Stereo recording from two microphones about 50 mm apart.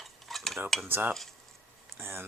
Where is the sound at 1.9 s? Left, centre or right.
Right.